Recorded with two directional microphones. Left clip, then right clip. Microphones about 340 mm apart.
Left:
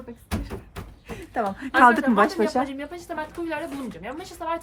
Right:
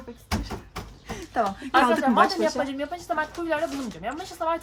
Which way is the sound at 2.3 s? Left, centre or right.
Centre.